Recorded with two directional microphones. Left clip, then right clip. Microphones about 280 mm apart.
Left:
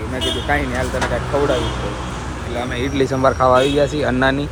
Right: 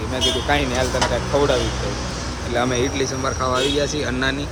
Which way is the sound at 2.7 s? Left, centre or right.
Centre.